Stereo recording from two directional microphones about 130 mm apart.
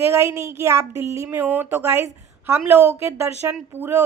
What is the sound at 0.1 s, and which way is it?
Speech, 20° right (ahead or behind).